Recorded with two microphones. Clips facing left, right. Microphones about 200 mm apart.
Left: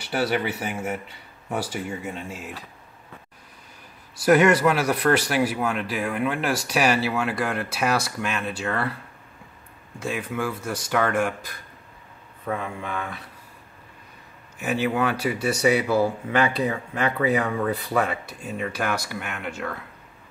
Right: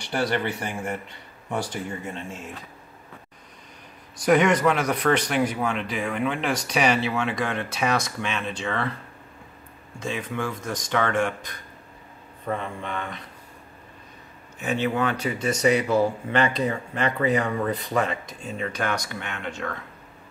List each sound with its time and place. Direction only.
0.0 s speech: 5° left (ahead or behind)
4.2 s speech: 5° left (ahead or behind)
9.9 s speech: 5° left (ahead or behind)
14.6 s speech: 10° left (ahead or behind)